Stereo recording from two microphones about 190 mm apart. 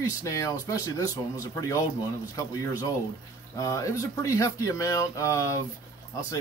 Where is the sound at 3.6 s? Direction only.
20° left (ahead or behind).